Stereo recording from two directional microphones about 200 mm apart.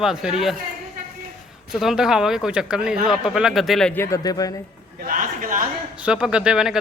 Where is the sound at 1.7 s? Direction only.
Centre (ahead or behind); by 4.6 s 20° left (ahead or behind).